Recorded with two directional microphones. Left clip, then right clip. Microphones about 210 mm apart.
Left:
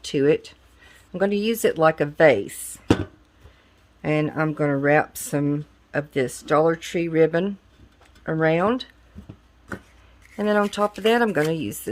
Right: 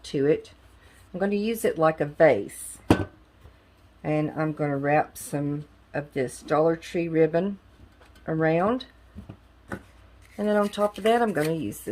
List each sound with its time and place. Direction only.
0.0 s speech: 40° left (ahead or behind)
4.0 s speech: 40° left (ahead or behind)
10.3 s speech: 35° left (ahead or behind)